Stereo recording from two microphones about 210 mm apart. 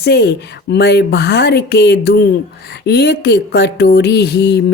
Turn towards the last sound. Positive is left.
turn(degrees=50)  # may be behind; listen again after turning